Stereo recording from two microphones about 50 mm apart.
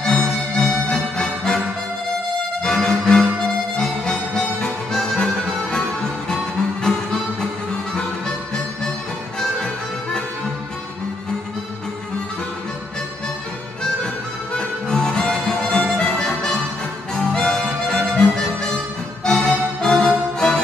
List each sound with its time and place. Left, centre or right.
0.0 s music: centre
2.6 s music: centre
14.5 s music: centre
17.1 s harmonica: centre
17.6 s music: centre